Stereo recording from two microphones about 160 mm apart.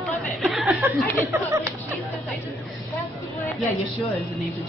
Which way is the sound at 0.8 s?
15° right (ahead or behind).